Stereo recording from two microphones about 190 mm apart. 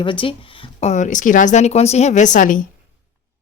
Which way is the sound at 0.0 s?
25° left (ahead or behind).